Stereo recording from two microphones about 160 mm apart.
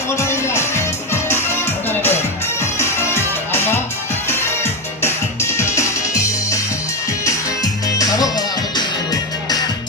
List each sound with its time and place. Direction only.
0.2 s music: 15° left (ahead or behind)
5.0 s music: 15° left (ahead or behind)
7.3 s music: 25° left (ahead or behind)